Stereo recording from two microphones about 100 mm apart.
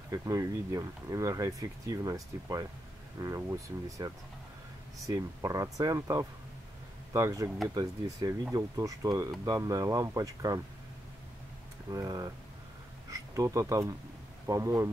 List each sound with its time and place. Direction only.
0.1 s speech: 35° right (ahead or behind)
11.9 s speech: 35° right (ahead or behind)